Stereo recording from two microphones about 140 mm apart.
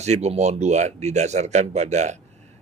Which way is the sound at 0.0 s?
50° right (ahead or behind).